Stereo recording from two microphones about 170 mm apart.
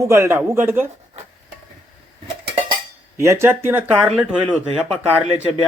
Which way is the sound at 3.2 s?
15° right (ahead or behind).